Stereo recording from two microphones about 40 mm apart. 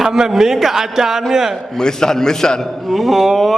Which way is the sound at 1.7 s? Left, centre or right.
Centre.